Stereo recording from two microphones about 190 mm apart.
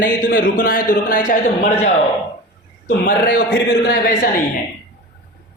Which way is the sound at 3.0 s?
45° left (ahead or behind).